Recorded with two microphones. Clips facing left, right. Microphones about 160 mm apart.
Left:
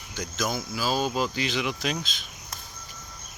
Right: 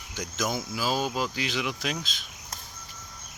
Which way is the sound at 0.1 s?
15° right (ahead or behind).